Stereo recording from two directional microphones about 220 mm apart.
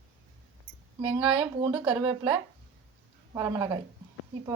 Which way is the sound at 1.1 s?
20° right (ahead or behind).